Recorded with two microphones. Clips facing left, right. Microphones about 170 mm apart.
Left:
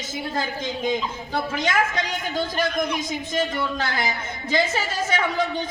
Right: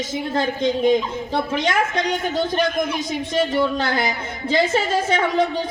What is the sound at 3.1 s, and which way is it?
A woman's voice, 30° right (ahead or behind).